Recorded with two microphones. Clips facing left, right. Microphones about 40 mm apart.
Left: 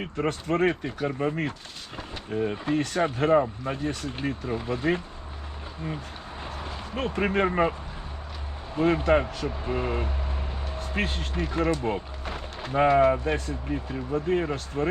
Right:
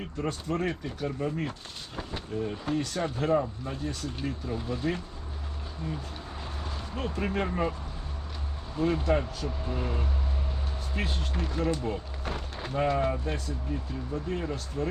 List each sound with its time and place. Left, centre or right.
0.0 s speech: left
6.4 s vehicle: left
6.9 s speech: left
8.7 s speech: left